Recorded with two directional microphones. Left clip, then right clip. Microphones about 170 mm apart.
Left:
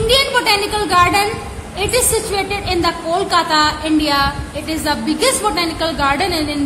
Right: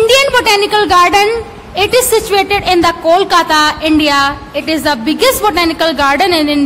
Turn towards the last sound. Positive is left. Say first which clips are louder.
# right 7 dB
turn(degrees=-35)  # may be behind; listen again after turning